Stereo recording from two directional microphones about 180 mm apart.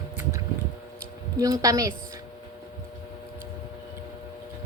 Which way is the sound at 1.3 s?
20° right (ahead or behind).